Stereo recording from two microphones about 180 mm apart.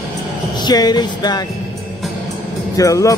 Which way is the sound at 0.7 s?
20° left (ahead or behind).